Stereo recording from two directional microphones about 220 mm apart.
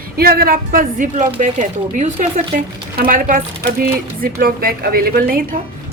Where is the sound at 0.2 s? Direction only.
40° right (ahead or behind).